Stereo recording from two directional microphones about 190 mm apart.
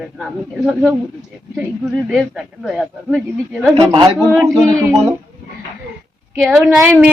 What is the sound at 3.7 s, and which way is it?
A woman's voice, 25° right (ahead or behind).